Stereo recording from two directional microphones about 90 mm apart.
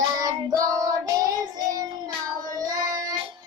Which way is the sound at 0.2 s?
45° right (ahead or behind).